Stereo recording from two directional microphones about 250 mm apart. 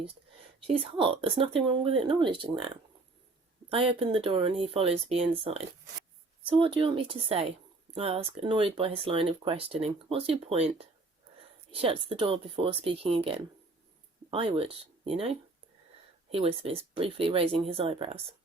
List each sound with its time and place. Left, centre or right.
0.7 s speech: right
3.7 s speech: right